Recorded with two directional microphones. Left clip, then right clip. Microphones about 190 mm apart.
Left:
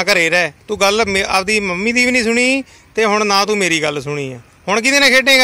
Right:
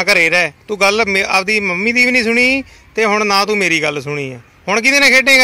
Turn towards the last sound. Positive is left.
turn(degrees=0)  # may be behind; listen again after turning